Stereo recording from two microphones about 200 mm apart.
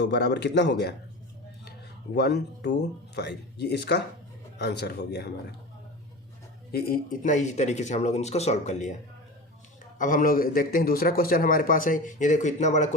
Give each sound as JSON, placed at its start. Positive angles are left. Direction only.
{"t": 0.0, "sound": "speech", "side_deg": 60}
{"t": 2.1, "sound": "speech", "side_deg": 55}
{"t": 6.7, "sound": "speech", "side_deg": 50}
{"t": 10.0, "sound": "a man's voice", "side_deg": 40}